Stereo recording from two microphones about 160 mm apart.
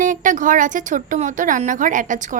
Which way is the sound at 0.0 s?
55° right (ahead or behind).